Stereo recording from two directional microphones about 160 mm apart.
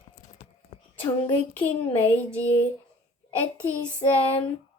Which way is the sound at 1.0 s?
30° left (ahead or behind).